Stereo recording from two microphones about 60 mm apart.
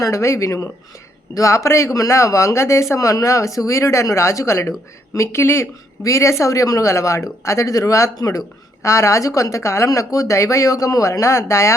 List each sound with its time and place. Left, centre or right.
0.0 s a woman's voice: left
2.9 s a woman's voice: left
8.1 s speech: left
8.8 s a woman's voice: left